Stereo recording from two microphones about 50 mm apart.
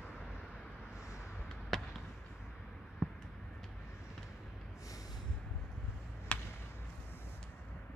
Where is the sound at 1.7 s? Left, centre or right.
Centre.